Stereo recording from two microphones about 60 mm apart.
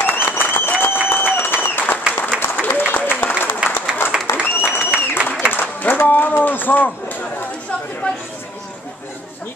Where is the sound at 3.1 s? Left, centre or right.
Left.